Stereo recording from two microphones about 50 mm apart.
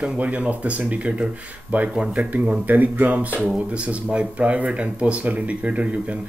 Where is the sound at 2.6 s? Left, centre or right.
Right.